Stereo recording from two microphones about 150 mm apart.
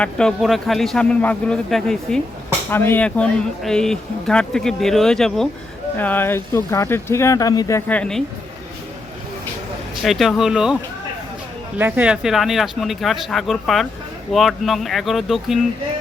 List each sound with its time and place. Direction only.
0.0 s speech: 5° left (ahead or behind); by 7.8 s 25° left (ahead or behind)
7.9 s speech: 5° left (ahead or behind)
10.0 s speech: centre (ahead or behind)
11.8 s speech: 10° right (ahead or behind)